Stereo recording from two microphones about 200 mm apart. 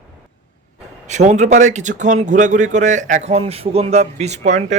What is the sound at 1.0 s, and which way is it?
Speech, 35° right (ahead or behind).